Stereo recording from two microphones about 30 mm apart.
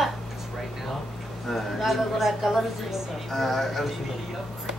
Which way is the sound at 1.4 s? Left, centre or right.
Centre.